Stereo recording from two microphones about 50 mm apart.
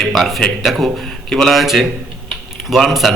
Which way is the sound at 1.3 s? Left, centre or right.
Centre.